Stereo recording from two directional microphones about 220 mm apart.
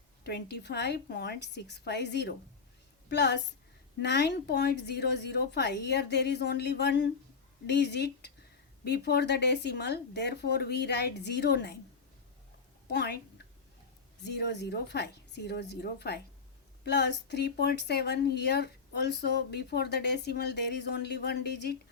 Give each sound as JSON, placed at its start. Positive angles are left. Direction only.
{"t": 0.3, "sound": "speech", "side_deg": 50}
{"t": 12.9, "sound": "speech", "side_deg": 50}
{"t": 14.3, "sound": "speech", "side_deg": 50}